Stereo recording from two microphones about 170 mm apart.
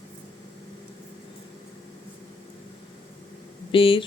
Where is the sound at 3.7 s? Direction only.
30° left (ahead or behind).